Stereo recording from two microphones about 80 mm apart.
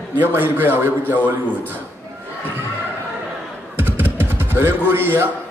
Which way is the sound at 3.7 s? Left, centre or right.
Right.